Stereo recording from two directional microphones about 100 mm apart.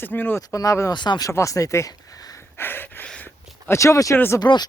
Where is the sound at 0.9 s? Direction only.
45° left (ahead or behind).